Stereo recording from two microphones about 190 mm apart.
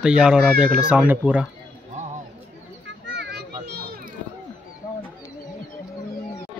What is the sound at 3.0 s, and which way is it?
Children playing, 60° right (ahead or behind).